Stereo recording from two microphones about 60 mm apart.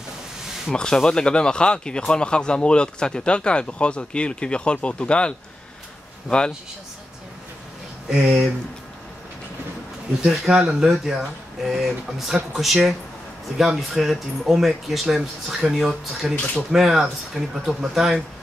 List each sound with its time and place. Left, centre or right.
0.7 s speech: centre
8.1 s speech: centre
10.2 s speech: centre